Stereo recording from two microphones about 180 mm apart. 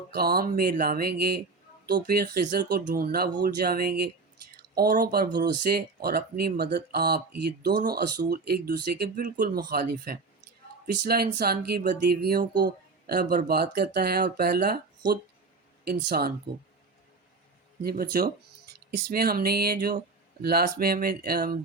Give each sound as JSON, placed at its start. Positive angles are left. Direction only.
{"t": 0.1, "sound": "speech", "side_deg": -60}
{"t": 9.2, "sound": "speech", "side_deg": -45}
{"t": 9.6, "sound": "speech", "side_deg": -55}
{"t": 17.8, "sound": "speech", "side_deg": -55}